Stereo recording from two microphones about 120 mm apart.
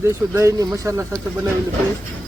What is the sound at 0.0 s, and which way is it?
Speech, 25° right (ahead or behind).